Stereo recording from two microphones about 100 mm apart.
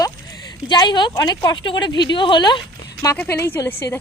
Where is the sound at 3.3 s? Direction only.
25° left (ahead or behind).